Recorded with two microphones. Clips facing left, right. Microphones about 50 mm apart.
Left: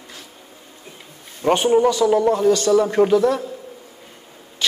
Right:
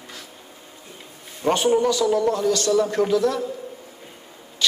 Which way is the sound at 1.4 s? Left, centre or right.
Centre.